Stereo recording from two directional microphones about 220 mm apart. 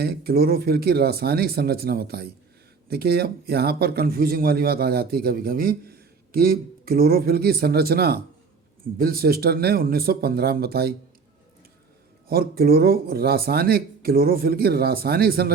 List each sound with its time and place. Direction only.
0.0 s speech: 45° right (ahead or behind)
12.3 s speech: 45° right (ahead or behind)